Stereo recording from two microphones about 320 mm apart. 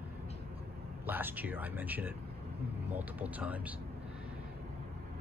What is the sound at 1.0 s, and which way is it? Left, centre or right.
Speech, centre.